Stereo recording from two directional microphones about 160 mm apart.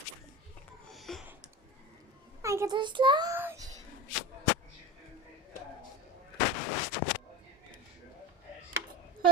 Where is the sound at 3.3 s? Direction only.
15° right (ahead or behind).